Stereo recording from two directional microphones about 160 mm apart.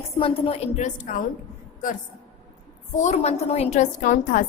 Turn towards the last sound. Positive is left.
turn(degrees=55)  # may be behind; listen again after turning